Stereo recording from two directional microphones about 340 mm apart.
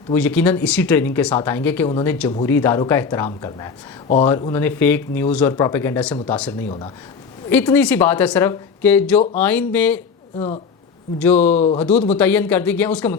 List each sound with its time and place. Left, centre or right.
0.1 s speech: centre
10.3 s speech: centre
11.2 s speech: centre
11.5 s speech: centre
11.8 s speech: centre